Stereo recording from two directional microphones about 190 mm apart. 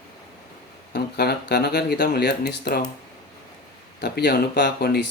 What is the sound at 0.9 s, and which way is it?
Speech, 60° left (ahead or behind).